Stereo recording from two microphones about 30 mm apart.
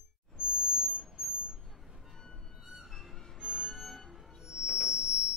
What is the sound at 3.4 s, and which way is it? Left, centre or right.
Vehicle, right.